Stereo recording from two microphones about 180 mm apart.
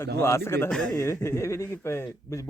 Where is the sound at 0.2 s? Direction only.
15° left (ahead or behind).